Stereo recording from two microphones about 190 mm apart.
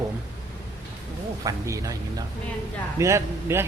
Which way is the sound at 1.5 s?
15° right (ahead or behind).